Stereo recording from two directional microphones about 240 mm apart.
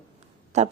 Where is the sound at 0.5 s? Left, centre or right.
Right.